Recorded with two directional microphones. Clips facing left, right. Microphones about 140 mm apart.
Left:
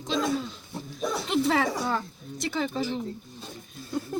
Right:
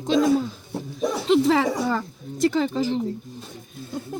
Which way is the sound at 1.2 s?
90° right.